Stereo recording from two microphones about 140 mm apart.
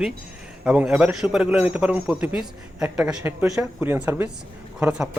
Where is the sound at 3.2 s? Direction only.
15° right (ahead or behind).